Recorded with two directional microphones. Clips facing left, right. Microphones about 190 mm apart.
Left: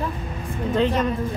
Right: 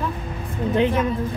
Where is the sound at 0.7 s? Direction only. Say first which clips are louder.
Right 1 dB; 10° right (ahead or behind).